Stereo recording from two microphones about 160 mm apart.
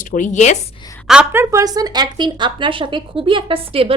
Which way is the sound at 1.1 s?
5° right (ahead or behind).